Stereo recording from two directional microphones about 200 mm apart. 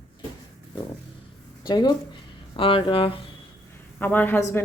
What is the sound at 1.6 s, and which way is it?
Speech, 20° left (ahead or behind).